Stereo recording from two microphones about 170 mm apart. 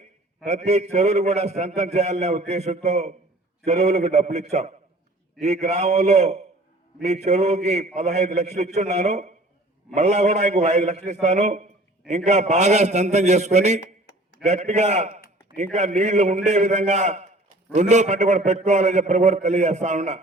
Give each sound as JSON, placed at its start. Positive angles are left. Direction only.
{"t": 0.4, "sound": "a man's voice", "side_deg": -40}